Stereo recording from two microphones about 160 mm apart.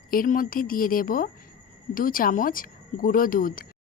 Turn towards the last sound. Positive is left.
turn(degrees=60)  # may be behind; listen again after turning